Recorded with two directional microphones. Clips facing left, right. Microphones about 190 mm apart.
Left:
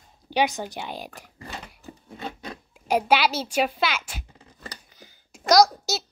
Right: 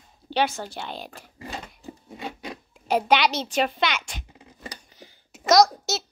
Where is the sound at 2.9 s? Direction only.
10° left (ahead or behind).